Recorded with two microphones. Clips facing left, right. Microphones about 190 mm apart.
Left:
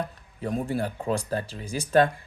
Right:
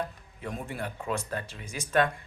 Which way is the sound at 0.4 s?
35° left (ahead or behind).